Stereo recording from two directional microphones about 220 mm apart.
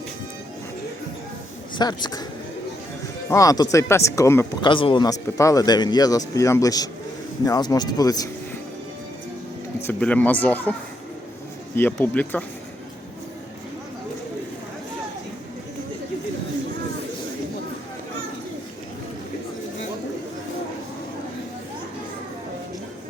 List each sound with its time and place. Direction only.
1.7 s speech: 20° left (ahead or behind)
3.2 s speech: 15° left (ahead or behind)
9.8 s speech: 5° left (ahead or behind)
11.8 s speech: 10° left (ahead or behind)